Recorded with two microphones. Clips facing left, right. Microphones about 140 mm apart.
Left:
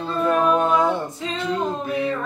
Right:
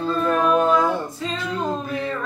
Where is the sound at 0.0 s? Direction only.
20° left (ahead or behind).